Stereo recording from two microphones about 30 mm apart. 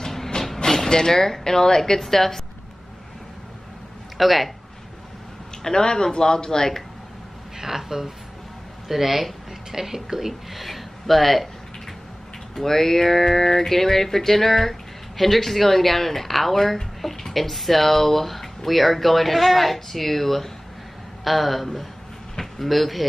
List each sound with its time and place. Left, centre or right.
0.0 s vehicle: centre
0.8 s speech: left
4.2 s speech: centre
5.6 s speech: left
7.5 s speech: centre
12.5 s speech: centre